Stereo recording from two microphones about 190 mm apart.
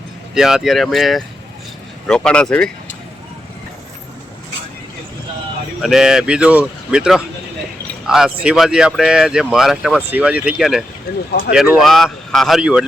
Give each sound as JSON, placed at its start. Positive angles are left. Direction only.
{"t": 0.3, "sound": "speech", "side_deg": 0}
{"t": 5.8, "sound": "speech", "side_deg": 0}
{"t": 11.1, "sound": "speech", "side_deg": 55}
{"t": 11.5, "sound": "speech", "side_deg": -5}